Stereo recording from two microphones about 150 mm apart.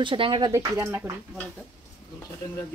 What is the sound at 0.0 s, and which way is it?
Speech, 35° right (ahead or behind).